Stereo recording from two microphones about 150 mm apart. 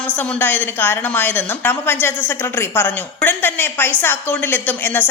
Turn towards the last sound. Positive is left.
turn(degrees=10)  # may be behind; listen again after turning